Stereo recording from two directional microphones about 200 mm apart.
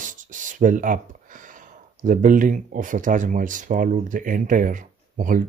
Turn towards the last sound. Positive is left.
turn(degrees=-40)  # may be behind; listen again after turning